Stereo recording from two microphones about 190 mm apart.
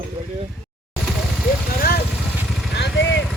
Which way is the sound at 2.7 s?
70° left (ahead or behind).